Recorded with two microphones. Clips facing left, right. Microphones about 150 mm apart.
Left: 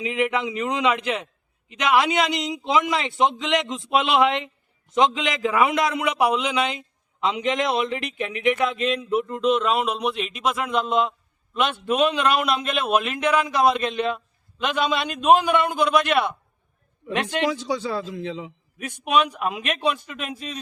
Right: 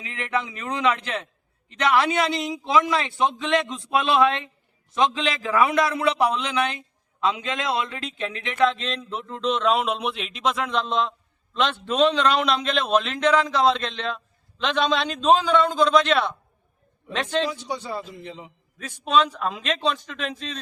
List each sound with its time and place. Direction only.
0.0 s a man's voice: 15° left (ahead or behind)
17.2 s a man's voice: 85° left
18.8 s a man's voice: 15° left (ahead or behind)